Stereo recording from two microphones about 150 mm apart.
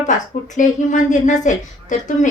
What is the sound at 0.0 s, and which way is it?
Speech, 55° left (ahead or behind).